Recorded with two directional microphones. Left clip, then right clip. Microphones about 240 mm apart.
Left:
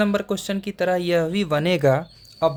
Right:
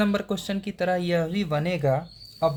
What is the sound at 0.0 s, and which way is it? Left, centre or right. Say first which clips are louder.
Speech: left 4 dB; centre.